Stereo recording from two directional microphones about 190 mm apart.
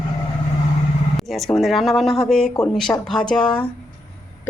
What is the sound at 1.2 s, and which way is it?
A woman's voice, centre (ahead or behind).